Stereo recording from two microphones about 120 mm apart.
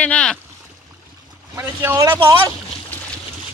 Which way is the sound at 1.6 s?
20° right (ahead or behind).